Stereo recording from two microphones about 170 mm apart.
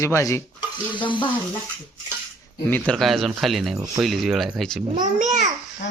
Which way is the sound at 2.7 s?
5° left (ahead or behind).